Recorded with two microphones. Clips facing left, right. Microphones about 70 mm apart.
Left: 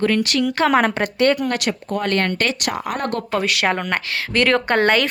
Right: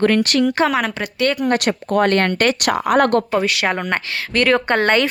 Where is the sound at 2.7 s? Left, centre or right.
Right.